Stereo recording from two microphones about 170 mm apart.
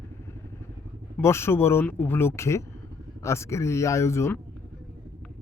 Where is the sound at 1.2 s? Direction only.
15° left (ahead or behind).